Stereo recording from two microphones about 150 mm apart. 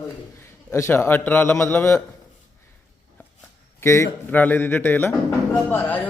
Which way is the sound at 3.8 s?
20° left (ahead or behind).